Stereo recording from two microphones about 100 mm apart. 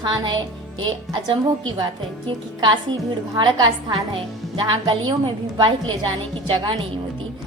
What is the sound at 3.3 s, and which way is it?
A woman's voice, 45° right (ahead or behind).